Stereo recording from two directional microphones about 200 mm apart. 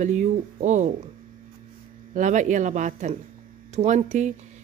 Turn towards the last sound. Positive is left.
turn(degrees=-35)  # may be behind; listen again after turning